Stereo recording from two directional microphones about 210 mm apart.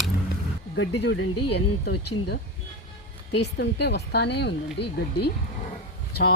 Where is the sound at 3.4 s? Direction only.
55° left (ahead or behind).